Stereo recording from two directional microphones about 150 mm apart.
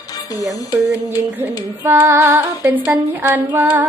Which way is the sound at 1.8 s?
15° right (ahead or behind).